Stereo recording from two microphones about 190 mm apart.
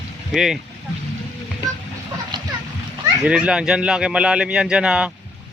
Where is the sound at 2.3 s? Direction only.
25° right (ahead or behind).